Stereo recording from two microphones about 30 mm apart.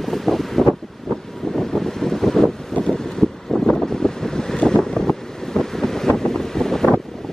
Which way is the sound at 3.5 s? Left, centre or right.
Left.